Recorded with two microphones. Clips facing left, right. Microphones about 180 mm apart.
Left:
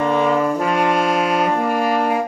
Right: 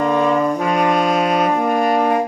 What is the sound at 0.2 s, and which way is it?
Brass instrument, 5° left (ahead or behind).